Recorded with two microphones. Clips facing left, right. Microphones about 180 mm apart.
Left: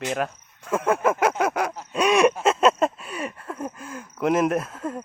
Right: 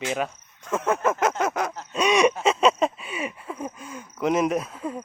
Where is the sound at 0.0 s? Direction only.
Centre (ahead or behind).